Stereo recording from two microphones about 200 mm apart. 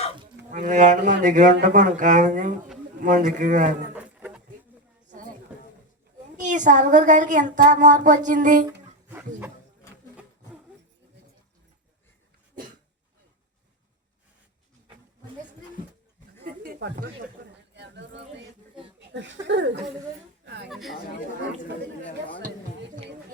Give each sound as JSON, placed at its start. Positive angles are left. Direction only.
{"t": 0.5, "sound": "a woman's voice", "side_deg": -40}
{"t": 3.9, "sound": "a sound", "side_deg": -5}
{"t": 5.0, "sound": "chatter", "side_deg": -40}
{"t": 6.3, "sound": "a woman's voice", "side_deg": -40}
{"t": 9.0, "sound": "music", "side_deg": -10}
{"t": 16.4, "sound": "a sound", "side_deg": -50}
{"t": 19.5, "sound": "speech", "side_deg": -60}
{"t": 20.4, "sound": "a sound", "side_deg": -60}
{"t": 20.7, "sound": "speech", "side_deg": 0}